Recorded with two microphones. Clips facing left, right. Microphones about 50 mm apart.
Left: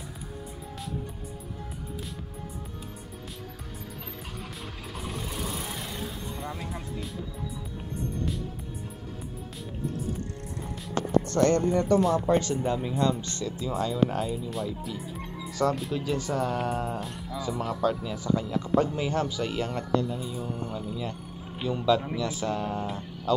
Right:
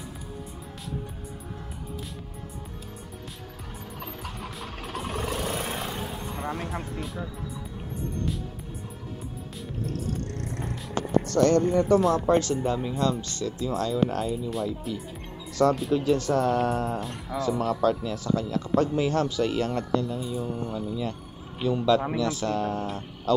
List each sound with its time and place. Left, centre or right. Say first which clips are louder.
4.7 s a sound: right 5 dB; right
5.0 s vehicle: right 5 dB; right
5.9 s music: right 3 dB; right
9.9 s music: right 2 dB; right
11.2 s speech: right 4 dB; left
11.7 s speech: right 2 dB; centre